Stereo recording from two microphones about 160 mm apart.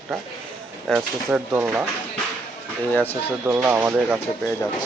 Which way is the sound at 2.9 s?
10° left (ahead or behind).